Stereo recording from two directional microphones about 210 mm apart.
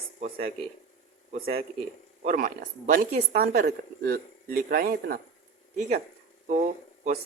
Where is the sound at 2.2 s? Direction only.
35° right (ahead or behind).